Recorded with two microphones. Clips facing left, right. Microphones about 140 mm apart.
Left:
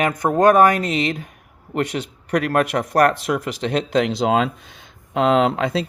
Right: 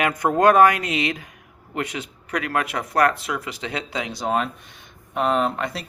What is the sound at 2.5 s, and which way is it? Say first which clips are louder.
Speech: left 3 dB; 50° left (ahead or behind).